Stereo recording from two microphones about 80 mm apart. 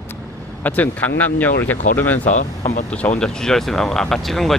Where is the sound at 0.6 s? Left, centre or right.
Left.